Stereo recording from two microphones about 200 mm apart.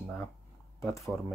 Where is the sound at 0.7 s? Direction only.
15° left (ahead or behind).